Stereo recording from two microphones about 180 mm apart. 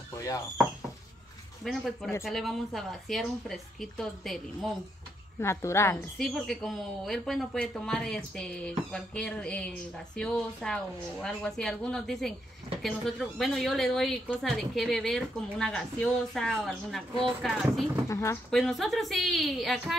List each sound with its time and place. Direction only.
0.1 s a sound: 15° left (ahead or behind)
1.6 s speech: centre (ahead or behind)
5.4 s a woman's voice: 15° left (ahead or behind)
6.1 s speech: centre (ahead or behind)
18.0 s a woman's voice: 15° left (ahead or behind)
18.5 s speech: centre (ahead or behind)